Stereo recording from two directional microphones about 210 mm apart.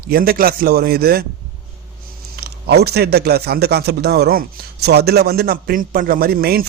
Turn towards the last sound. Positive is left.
turn(degrees=-45)  # may be behind; listen again after turning